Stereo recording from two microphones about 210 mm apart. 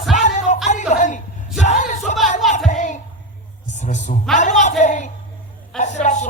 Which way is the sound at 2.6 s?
35° left (ahead or behind).